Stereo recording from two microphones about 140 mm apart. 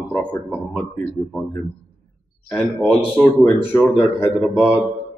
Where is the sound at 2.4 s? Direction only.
10° left (ahead or behind).